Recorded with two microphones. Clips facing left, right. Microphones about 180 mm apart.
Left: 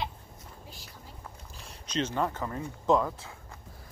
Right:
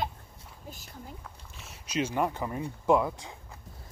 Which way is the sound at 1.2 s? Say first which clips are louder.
Left 1 dB; centre (ahead or behind).